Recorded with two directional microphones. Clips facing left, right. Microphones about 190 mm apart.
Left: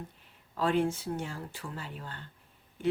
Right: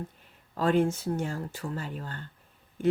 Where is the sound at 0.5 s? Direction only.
45° right (ahead or behind).